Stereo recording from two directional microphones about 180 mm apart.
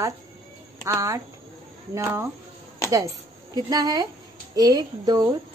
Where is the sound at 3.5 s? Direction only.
20° right (ahead or behind).